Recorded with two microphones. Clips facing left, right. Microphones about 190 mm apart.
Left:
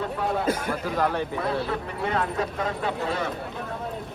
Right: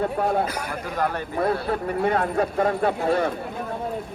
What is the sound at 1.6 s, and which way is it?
Speech, 50° right (ahead or behind).